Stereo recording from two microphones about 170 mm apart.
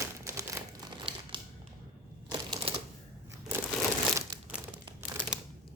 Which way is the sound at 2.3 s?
35° right (ahead or behind).